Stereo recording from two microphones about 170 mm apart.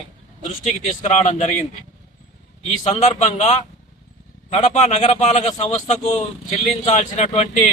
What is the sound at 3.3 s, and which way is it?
A man's voice, 40° left (ahead or behind).